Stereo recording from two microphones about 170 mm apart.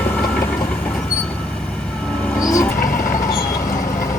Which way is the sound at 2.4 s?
20° left (ahead or behind).